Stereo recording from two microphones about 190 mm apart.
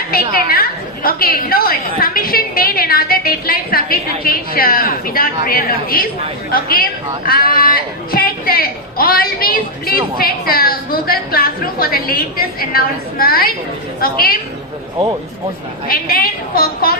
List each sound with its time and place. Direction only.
0.1 s a woman's voice: 50° left (ahead or behind)
15.9 s a man's voice: 50° left (ahead or behind)